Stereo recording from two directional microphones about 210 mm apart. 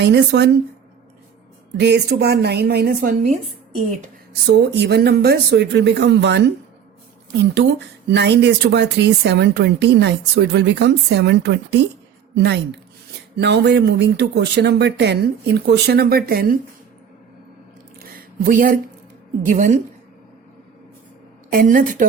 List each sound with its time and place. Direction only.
0.0 s speech: 55° right (ahead or behind)
1.8 s speech: 55° right (ahead or behind)
4.4 s speech: 55° right (ahead or behind)
7.5 s speech: 55° right (ahead or behind)
18.0 s a sound: 45° right (ahead or behind)
19.5 s a woman's voice: 35° right (ahead or behind)
21.5 s a woman's voice: 40° right (ahead or behind)